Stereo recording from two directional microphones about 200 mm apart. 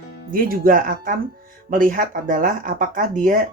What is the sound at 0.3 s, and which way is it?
Speech, 45° right (ahead or behind).